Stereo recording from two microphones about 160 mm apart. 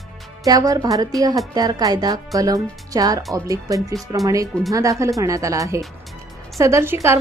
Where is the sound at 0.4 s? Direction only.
25° right (ahead or behind).